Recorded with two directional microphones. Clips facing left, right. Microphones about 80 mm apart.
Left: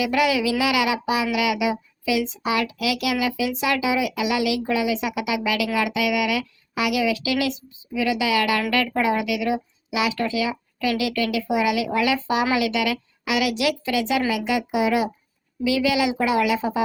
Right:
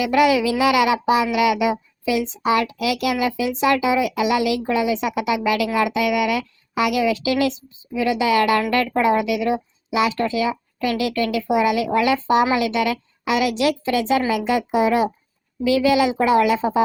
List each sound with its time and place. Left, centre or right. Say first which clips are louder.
0.1 s a woman's voice: right 4 dB; right